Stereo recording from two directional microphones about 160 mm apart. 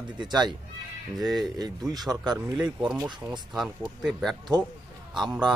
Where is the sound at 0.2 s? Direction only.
25° right (ahead or behind).